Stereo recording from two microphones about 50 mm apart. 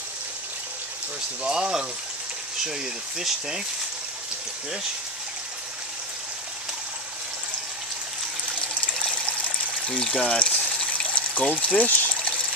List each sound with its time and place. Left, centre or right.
1.4 s speech: centre
9.1 s water: left
10.3 s speech: left
10.8 s water: left
11.6 s speech: left